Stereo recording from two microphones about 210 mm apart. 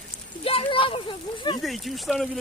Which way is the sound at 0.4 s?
25° left (ahead or behind).